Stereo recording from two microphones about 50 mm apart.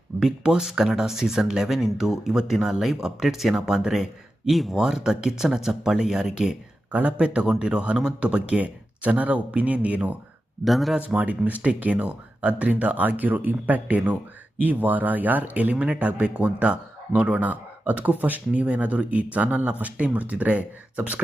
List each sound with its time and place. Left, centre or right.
0.2 s speech: centre
6.9 s speech: right
10.6 s speech: centre
11.0 s speech: right